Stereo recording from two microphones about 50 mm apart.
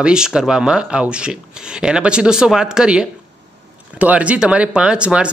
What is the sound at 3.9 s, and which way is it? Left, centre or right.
Speech, right.